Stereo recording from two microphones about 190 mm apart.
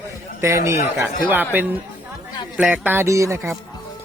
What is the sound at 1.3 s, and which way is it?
Speech, 10° right (ahead or behind).